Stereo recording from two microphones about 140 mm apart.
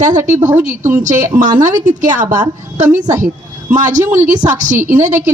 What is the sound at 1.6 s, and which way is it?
A woman's voice, 60° right (ahead or behind).